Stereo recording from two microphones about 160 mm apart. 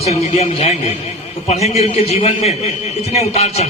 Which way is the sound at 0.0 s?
40° left (ahead or behind).